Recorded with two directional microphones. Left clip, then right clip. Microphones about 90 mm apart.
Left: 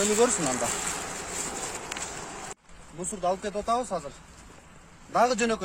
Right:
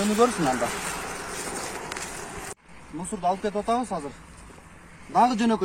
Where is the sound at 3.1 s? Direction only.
45° left (ahead or behind).